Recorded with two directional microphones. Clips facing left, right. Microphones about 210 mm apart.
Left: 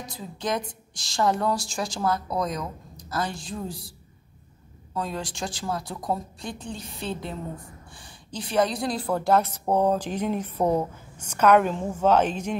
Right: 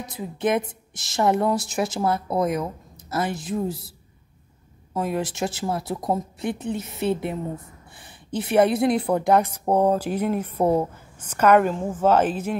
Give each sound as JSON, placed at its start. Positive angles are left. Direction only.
{"t": 0.5, "sound": "a woman's voice", "side_deg": -20}
{"t": 4.9, "sound": "speech", "side_deg": -20}
{"t": 8.4, "sound": "a woman's voice", "side_deg": -25}